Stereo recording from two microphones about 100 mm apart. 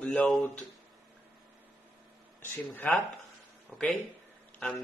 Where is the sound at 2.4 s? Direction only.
20° left (ahead or behind).